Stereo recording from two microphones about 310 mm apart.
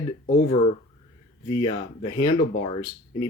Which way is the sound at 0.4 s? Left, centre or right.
Centre.